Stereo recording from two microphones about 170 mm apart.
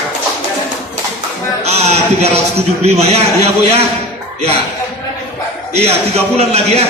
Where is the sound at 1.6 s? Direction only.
40° right (ahead or behind).